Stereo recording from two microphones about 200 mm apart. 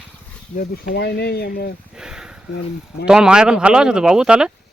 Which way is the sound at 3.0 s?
5° right (ahead or behind).